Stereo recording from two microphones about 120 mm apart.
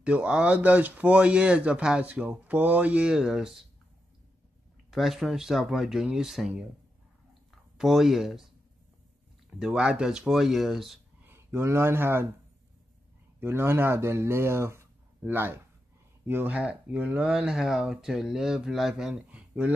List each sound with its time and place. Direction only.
0.0 s speech: 10° right (ahead or behind)
4.9 s speech: centre (ahead or behind)
7.7 s speech: centre (ahead or behind)
9.6 s speech: 5° right (ahead or behind)
11.2 s speech: 20° right (ahead or behind)
13.4 s speech: 20° right (ahead or behind)